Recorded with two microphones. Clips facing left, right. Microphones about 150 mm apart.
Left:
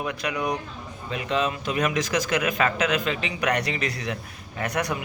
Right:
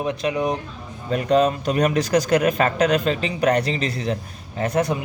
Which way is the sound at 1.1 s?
40° right (ahead or behind).